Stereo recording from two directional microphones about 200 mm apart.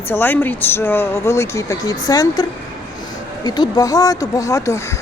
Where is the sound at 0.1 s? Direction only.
10° left (ahead or behind).